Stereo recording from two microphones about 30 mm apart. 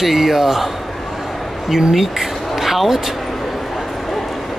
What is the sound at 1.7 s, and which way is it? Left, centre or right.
Speech, centre.